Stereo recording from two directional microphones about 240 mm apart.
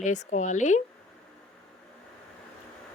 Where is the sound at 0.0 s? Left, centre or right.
Left.